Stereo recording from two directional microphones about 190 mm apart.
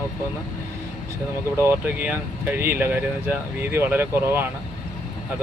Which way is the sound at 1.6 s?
10° right (ahead or behind).